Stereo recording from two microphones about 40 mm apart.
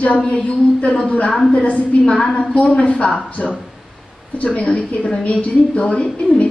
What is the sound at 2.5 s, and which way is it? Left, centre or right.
Speech, left.